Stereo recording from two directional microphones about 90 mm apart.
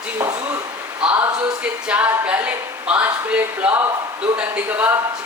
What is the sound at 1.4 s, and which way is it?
A woman's voice, 10° right (ahead or behind).